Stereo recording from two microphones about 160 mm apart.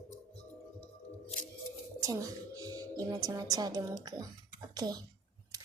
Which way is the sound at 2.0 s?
20° right (ahead or behind).